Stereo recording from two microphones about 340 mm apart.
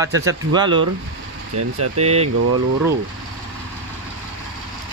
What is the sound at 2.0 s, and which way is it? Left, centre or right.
Speech, centre.